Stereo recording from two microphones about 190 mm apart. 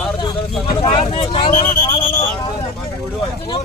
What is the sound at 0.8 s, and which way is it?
Speech, 30° left (ahead or behind).